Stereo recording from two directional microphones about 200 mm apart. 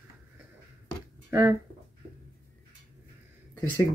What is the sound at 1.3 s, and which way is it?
Speech, 10° right (ahead or behind).